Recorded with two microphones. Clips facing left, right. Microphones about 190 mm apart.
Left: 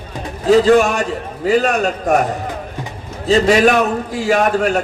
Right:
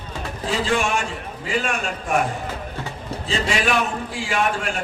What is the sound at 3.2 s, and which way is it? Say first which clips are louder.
A man's voice: left 12 dB; 40° left (ahead or behind).